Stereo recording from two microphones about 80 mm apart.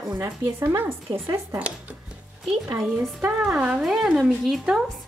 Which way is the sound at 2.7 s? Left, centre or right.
Right.